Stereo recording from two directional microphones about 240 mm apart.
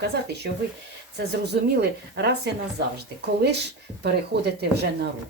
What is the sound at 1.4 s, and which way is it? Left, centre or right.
Speech, right.